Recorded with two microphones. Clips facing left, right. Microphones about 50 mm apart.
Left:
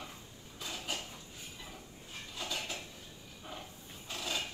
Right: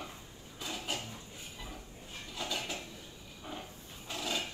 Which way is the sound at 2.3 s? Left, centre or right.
Right.